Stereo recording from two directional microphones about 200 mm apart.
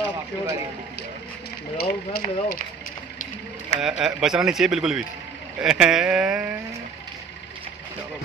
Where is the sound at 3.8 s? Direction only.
Centre (ahead or behind).